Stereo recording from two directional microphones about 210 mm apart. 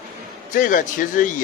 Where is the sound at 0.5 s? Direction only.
40° left (ahead or behind).